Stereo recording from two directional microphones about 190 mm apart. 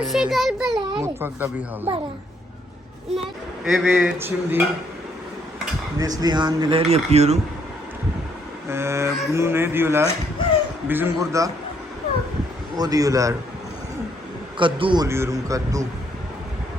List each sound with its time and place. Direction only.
0.0 s a child's voice: centre (ahead or behind)
0.9 s speech: 10° right (ahead or behind)
3.6 s speech: 5° right (ahead or behind)
6.0 s speech: 20° right (ahead or behind)
8.7 s speech: 15° right (ahead or behind)
12.7 s speech: 20° right (ahead or behind)
14.6 s speech: 25° right (ahead or behind)
15.0 s speech: 15° right (ahead or behind)